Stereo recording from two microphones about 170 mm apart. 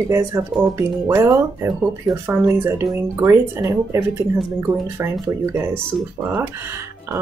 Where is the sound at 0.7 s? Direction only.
15° right (ahead or behind).